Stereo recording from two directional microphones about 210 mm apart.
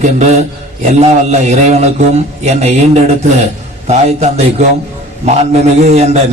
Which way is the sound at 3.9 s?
30° right (ahead or behind).